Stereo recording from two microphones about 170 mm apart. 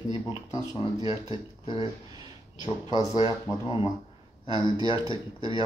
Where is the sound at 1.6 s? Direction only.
30° left (ahead or behind).